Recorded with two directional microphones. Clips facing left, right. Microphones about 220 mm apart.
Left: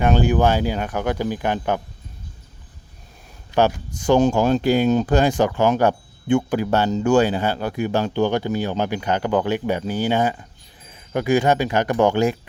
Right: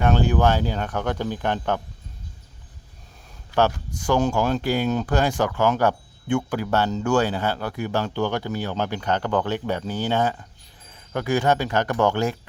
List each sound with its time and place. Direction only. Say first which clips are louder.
0.0 s speech: left 2 dB; 15° left (ahead or behind)
3.5 s speech: left 3 dB; 15° left (ahead or behind)